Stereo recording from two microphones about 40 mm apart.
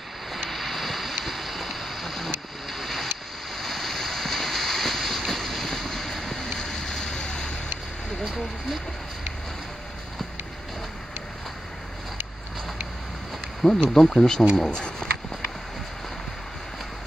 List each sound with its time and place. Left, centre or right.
0.5 s a sound: centre
3.5 s waves: centre; by 7.5 s left
13.6 s speech: centre